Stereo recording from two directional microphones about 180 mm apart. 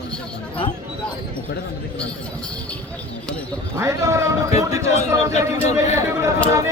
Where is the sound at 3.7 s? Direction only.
15° right (ahead or behind).